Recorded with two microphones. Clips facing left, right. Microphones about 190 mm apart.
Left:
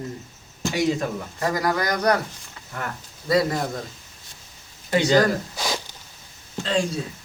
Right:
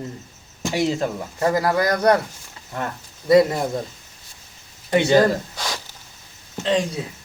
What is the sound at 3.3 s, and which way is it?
Speech, 25° right (ahead or behind).